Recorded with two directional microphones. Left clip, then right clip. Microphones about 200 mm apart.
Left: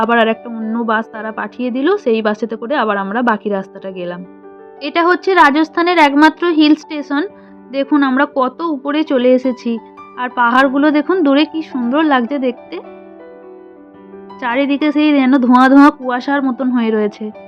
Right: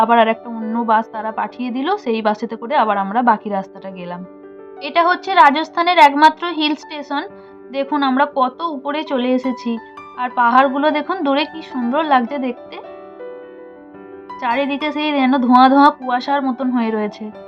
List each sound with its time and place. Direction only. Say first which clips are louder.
0.0 s a woman's voice: even; 20° left (ahead or behind)
14.3 s a woman's voice: left 3 dB; 25° left (ahead or behind)